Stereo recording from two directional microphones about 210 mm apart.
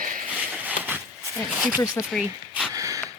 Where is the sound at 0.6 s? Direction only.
10° right (ahead or behind).